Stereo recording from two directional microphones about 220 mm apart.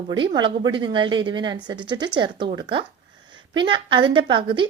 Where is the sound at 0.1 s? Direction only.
20° right (ahead or behind).